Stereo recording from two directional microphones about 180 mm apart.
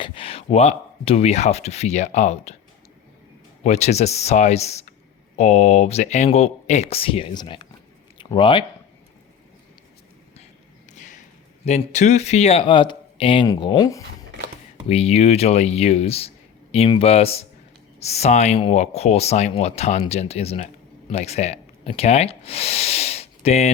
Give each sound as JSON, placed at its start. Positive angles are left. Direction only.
{"t": 0.0, "sound": "speech", "side_deg": 30}
{"t": 3.6, "sound": "speech", "side_deg": 35}
{"t": 10.9, "sound": "a sound", "side_deg": 45}
{"t": 11.6, "sound": "speech", "side_deg": 40}
{"t": 14.8, "sound": "speech", "side_deg": 35}